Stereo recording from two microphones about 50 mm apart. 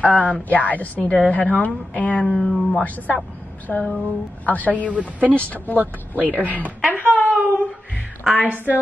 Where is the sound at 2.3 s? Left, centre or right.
Centre.